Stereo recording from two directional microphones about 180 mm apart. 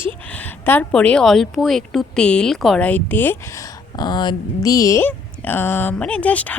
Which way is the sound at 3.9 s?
25° left (ahead or behind).